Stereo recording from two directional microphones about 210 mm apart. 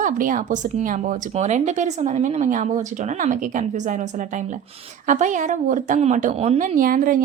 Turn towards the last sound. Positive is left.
turn(degrees=-40)  # may be behind; listen again after turning